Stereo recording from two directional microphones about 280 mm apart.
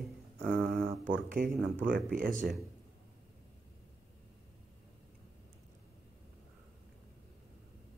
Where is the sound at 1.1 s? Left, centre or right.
Right.